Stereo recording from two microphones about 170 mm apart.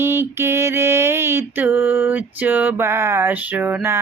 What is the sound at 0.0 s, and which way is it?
Mantra, 15° right (ahead or behind).